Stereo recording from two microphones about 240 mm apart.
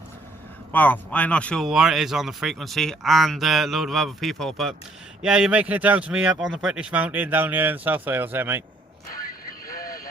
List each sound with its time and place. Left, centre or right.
0.7 s speech: centre
9.6 s vehicle: left